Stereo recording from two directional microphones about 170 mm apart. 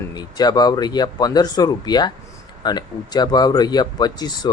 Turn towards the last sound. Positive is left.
turn(degrees=25)  # may be behind; listen again after turning